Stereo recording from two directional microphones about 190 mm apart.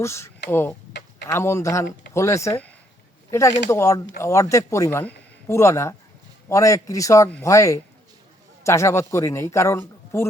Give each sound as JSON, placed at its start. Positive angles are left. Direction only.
{"t": 0.0, "sound": "a man's voice", "side_deg": 15}